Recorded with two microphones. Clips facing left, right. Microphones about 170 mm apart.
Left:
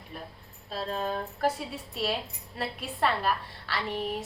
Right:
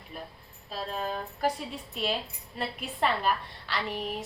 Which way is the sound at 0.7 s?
5° right (ahead or behind).